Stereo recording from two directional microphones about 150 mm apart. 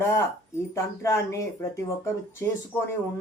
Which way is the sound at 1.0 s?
20° left (ahead or behind).